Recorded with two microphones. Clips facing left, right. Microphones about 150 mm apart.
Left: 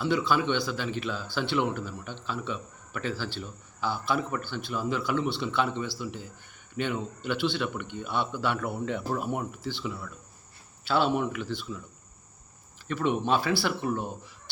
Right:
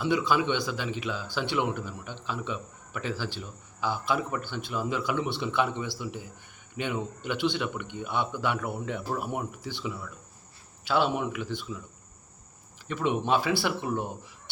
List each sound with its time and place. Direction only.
0.0 s speech: 15° right (ahead or behind)
12.9 s speech: 15° right (ahead or behind)